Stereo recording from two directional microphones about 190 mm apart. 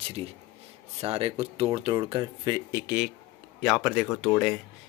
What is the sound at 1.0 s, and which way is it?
Speech, 30° right (ahead or behind).